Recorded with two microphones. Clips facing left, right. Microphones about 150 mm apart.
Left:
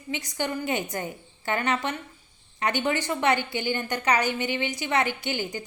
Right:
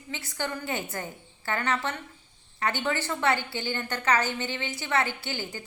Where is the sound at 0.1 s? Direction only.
15° left (ahead or behind).